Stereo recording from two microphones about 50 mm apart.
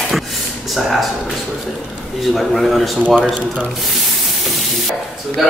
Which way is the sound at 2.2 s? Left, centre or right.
Centre.